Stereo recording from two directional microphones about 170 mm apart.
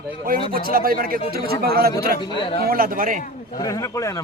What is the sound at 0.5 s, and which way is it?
A man's voice, 60° right (ahead or behind).